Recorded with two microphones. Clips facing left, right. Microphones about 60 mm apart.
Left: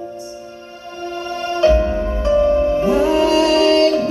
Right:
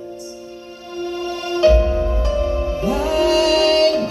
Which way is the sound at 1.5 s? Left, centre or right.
Left.